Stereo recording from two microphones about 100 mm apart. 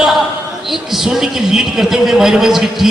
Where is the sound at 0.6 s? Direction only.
5° right (ahead or behind).